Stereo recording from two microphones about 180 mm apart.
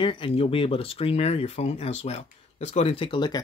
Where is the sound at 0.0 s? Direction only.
30° left (ahead or behind).